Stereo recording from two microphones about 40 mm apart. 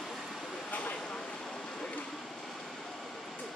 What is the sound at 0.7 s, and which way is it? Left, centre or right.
Vehicle, left.